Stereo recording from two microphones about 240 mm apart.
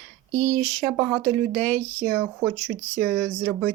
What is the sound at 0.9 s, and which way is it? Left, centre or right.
Speech, centre.